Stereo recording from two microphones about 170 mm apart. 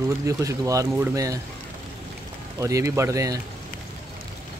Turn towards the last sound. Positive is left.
turn(degrees=-20)  # may be behind; listen again after turning